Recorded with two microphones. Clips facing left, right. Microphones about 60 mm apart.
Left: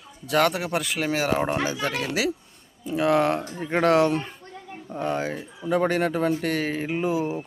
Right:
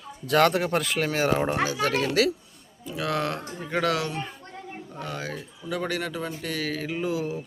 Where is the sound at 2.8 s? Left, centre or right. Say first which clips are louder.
Left 7 dB; left.